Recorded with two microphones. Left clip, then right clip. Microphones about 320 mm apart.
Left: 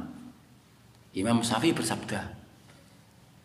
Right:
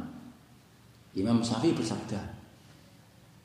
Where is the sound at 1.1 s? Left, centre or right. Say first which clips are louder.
Left 2 dB; left.